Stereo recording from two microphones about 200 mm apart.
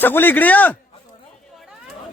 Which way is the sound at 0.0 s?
10° left (ahead or behind).